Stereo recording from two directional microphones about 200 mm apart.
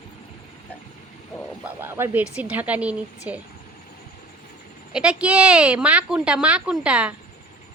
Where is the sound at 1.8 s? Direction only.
10° right (ahead or behind).